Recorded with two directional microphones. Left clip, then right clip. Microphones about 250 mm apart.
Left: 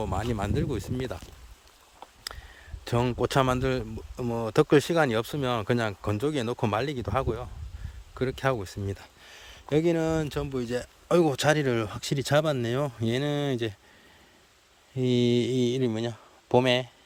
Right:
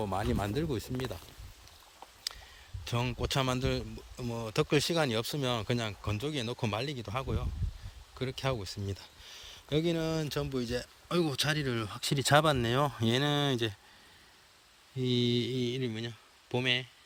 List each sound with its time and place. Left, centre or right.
0.0 s speech: centre
2.3 s a sound: left
2.8 s speech: left; by 13.7 s centre
14.9 s speech: centre